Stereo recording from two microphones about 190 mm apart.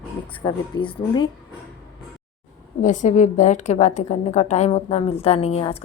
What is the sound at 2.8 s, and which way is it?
A woman's voice, 40° left (ahead or behind).